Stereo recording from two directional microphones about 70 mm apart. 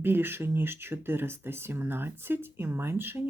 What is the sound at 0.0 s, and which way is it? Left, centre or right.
Speech, right.